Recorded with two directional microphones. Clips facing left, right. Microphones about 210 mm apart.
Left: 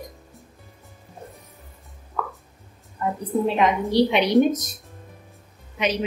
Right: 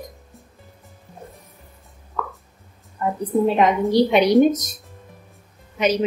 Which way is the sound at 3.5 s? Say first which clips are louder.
Right 2 dB; 45° right (ahead or behind).